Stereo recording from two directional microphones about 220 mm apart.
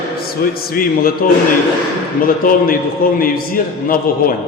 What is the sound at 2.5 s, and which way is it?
A man's voice, 40° left (ahead or behind).